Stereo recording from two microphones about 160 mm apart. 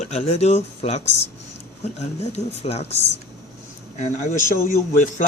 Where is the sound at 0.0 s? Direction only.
40° left (ahead or behind).